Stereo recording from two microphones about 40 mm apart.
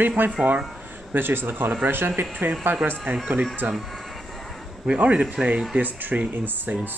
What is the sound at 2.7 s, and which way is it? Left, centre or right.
Speech, right.